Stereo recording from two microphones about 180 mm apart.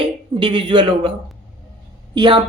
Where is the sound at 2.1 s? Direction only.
25° right (ahead or behind).